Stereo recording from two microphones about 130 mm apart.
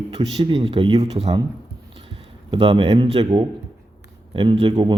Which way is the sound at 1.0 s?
55° right (ahead or behind).